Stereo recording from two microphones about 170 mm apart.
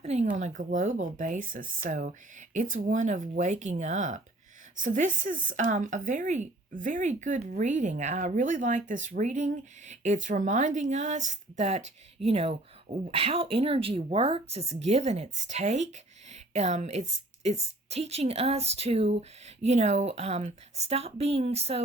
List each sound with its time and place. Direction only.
0.0 s speech: 40° right (ahead or behind)